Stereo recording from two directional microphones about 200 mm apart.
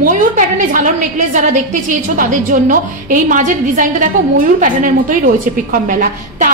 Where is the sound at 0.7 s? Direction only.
40° right (ahead or behind).